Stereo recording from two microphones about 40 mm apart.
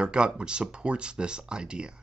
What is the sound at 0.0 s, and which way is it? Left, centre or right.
Speech, right.